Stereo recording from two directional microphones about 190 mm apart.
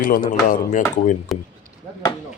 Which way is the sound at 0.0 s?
45° left (ahead or behind).